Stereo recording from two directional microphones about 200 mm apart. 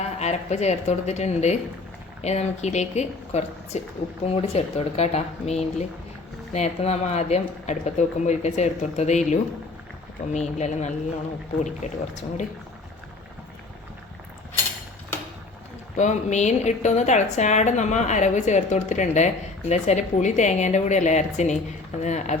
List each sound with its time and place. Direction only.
0.0 s a woman's voice: 35° left (ahead or behind)
16.0 s a woman's voice: 35° left (ahead or behind)